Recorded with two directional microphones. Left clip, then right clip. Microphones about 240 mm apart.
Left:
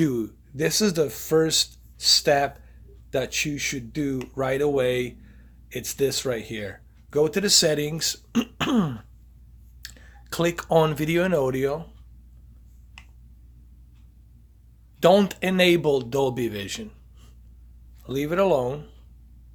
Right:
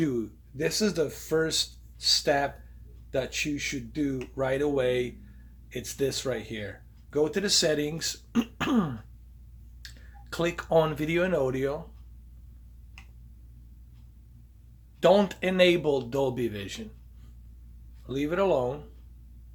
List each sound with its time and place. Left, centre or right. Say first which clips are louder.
0.0 s speech: left 4 dB; left
15.0 s speech: left 3 dB; left
18.0 s speech: left 4 dB; left